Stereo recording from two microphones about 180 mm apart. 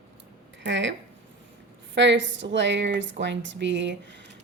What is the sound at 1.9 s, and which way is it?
A woman's voice, 80° right.